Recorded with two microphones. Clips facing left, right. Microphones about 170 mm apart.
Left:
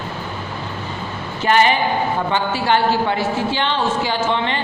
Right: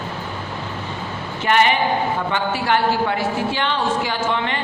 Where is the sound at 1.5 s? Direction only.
35° left (ahead or behind).